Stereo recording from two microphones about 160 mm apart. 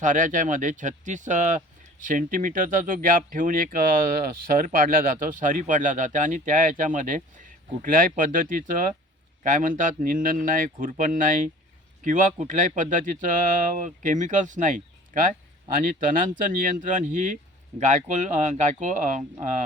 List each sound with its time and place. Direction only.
0.0 s speech: 55° right (ahead or behind)